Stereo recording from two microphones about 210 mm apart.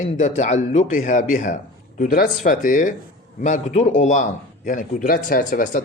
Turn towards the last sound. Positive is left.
turn(degrees=40)  # may be behind; listen again after turning